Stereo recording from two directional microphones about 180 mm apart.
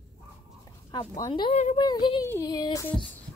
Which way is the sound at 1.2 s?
25° left (ahead or behind).